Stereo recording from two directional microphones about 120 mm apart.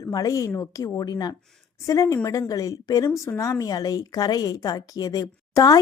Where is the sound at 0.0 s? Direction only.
30° left (ahead or behind).